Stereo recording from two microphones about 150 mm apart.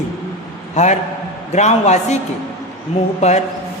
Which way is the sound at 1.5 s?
50° left (ahead or behind).